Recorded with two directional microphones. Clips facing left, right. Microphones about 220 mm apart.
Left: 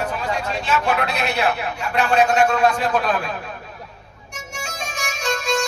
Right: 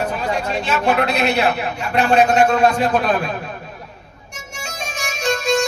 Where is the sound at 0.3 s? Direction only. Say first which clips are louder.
Even; 25° right (ahead or behind).